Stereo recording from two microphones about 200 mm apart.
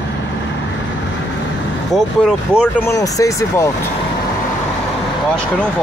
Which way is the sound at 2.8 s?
15° left (ahead or behind).